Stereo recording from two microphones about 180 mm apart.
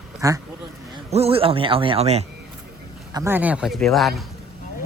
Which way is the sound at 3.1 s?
10° right (ahead or behind).